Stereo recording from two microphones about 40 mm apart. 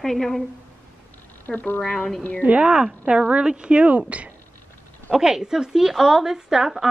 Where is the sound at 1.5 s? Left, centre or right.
Left.